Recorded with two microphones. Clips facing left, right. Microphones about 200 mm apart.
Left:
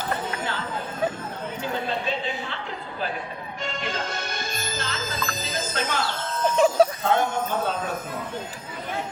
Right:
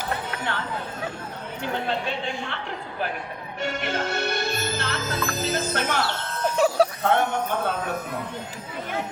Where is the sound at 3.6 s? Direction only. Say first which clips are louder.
Right 4 dB; 65° right (ahead or behind).